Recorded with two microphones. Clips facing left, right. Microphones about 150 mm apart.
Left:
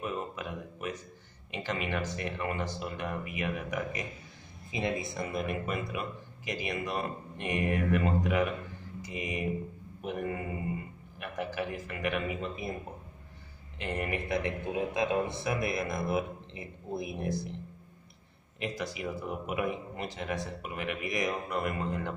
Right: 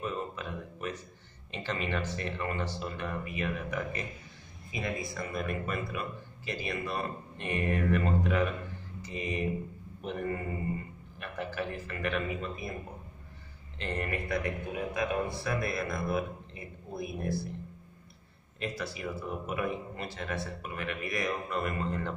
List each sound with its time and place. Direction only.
0.0 s a sound: 10° left (ahead or behind)
1.5 s speech: 10° left (ahead or behind)
4.7 s speech: 25° left (ahead or behind)
13.7 s a man's voice: 10° left (ahead or behind)
18.6 s speech: 15° left (ahead or behind)